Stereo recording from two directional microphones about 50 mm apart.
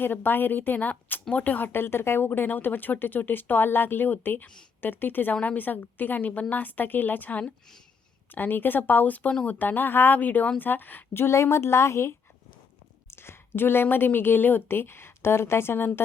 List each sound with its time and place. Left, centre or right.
0.0 s speech: left
1.7 s a woman's voice: left
13.1 s a woman's voice: left